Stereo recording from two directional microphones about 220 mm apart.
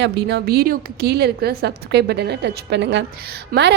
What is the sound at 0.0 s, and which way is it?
A woman's voice, 45° right (ahead or behind).